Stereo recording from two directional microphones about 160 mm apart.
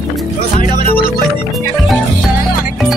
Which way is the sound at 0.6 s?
60° left (ahead or behind).